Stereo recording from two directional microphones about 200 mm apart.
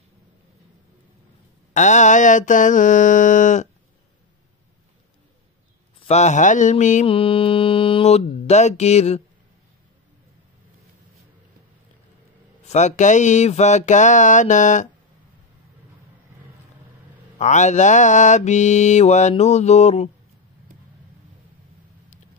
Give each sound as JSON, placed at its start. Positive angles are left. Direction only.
{"t": 1.7, "sound": "mantra", "side_deg": 35}
{"t": 5.9, "sound": "mantra", "side_deg": 35}
{"t": 12.6, "sound": "mantra", "side_deg": 35}
{"t": 17.4, "sound": "mantra", "side_deg": 35}